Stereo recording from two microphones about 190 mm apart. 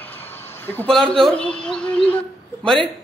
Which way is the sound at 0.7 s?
5° left (ahead or behind).